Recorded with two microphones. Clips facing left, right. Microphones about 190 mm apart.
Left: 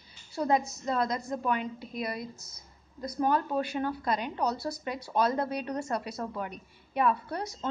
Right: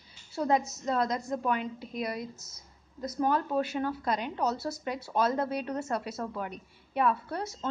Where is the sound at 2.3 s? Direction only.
10° left (ahead or behind).